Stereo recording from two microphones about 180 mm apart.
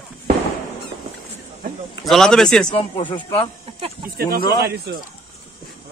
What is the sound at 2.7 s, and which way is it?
Speech, 25° left (ahead or behind).